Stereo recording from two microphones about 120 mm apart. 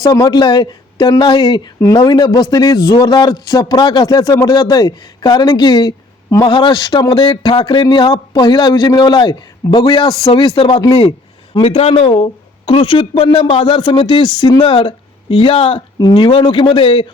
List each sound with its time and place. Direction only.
0.0 s speech: 30° left (ahead or behind)